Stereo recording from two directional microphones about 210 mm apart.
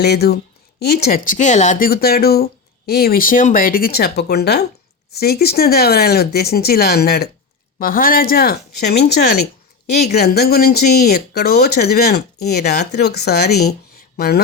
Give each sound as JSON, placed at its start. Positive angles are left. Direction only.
{"t": 0.0, "sound": "speech", "side_deg": 50}